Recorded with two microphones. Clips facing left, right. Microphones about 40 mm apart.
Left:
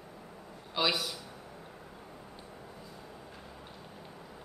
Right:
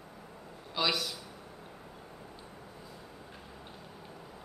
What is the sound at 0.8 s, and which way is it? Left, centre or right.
Speech, centre.